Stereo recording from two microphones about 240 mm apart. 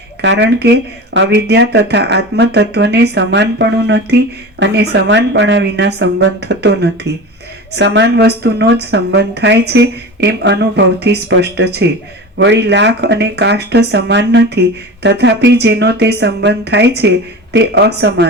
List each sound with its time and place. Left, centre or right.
0.2 s speech: right